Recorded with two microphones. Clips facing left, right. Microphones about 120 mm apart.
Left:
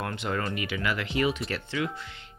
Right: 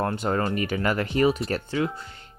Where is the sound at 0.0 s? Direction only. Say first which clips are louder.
Right 6 dB; 35° right (ahead or behind).